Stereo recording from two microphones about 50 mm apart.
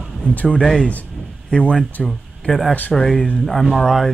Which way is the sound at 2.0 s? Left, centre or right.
Centre.